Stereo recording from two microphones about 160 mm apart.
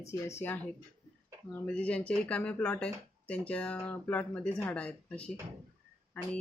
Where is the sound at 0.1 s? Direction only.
15° left (ahead or behind).